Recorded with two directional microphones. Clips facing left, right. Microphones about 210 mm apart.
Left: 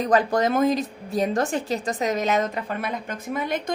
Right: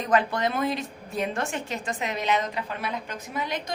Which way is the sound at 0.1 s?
40° left (ahead or behind).